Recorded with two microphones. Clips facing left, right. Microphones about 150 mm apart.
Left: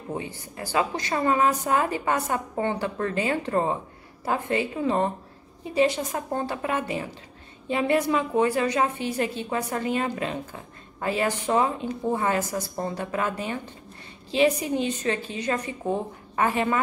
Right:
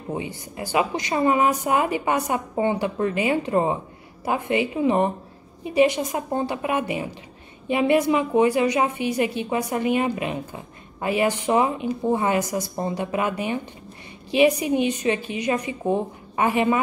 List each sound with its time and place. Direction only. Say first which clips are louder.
0.1 s a woman's voice: right 3 dB; 15° right (ahead or behind)